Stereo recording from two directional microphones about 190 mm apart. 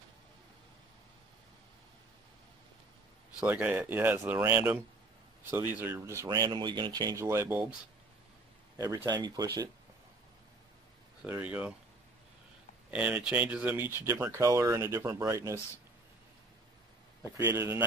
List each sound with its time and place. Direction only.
3.3 s speech: 10° right (ahead or behind)
8.7 s speech: 20° right (ahead or behind)
11.2 s speech: 5° right (ahead or behind)
12.9 s speech: 5° right (ahead or behind)
17.2 s speech: 15° right (ahead or behind)